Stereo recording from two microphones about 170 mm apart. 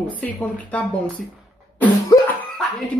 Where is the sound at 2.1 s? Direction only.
20° left (ahead or behind).